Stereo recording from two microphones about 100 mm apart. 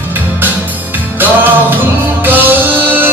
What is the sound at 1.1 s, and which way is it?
Music, 20° right (ahead or behind).